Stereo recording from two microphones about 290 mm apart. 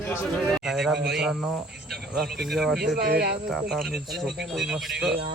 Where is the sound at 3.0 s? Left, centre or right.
Right.